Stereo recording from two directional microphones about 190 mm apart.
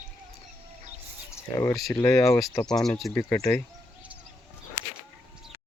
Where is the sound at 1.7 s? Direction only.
Centre (ahead or behind).